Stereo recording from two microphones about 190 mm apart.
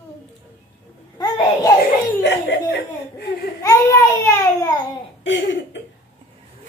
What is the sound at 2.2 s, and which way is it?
Speech, 65° left (ahead or behind).